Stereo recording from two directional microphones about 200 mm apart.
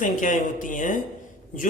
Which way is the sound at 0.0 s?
40° left (ahead or behind).